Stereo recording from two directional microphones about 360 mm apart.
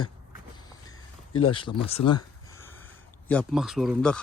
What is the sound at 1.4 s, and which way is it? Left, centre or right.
Speech, centre.